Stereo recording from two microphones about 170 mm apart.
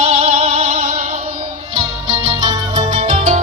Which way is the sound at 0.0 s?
35° right (ahead or behind).